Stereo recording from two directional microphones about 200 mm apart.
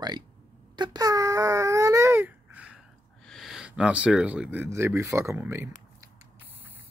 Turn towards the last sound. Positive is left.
turn(degrees=-15)  # may be behind; listen again after turning